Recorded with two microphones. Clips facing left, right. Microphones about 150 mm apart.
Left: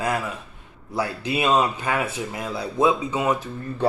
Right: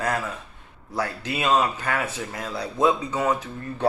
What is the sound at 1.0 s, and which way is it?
Speech, 15° left (ahead or behind).